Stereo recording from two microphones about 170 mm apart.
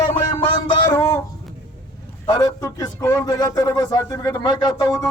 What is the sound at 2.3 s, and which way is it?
A man's voice, 20° left (ahead or behind).